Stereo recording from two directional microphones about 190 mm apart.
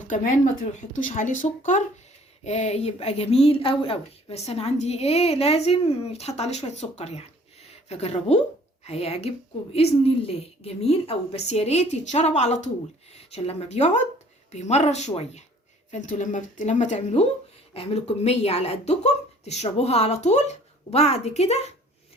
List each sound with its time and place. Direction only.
0.1 s a woman's voice: 40° left (ahead or behind)